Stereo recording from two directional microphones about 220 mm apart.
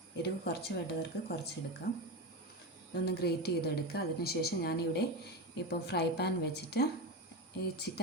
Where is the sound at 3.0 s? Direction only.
45° left (ahead or behind).